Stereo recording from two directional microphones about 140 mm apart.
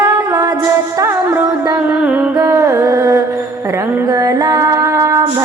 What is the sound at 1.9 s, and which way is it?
Music, 10° right (ahead or behind).